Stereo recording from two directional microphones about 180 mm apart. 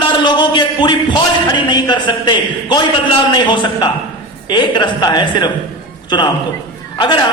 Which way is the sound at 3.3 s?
25° left (ahead or behind).